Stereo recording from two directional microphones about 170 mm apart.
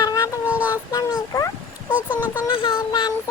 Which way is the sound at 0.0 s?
20° left (ahead or behind).